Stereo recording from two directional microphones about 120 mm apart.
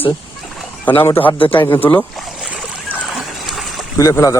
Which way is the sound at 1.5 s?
15° left (ahead or behind).